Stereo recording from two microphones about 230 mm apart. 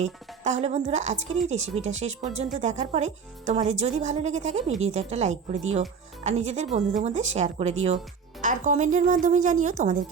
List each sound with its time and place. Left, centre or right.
0.0 s speech: right